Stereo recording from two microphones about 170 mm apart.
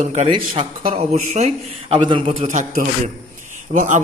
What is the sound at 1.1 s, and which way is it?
A man's voice, 45° right (ahead or behind).